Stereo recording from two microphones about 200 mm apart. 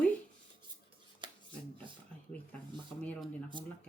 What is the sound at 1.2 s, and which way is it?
Finger snapping, 25° right (ahead or behind).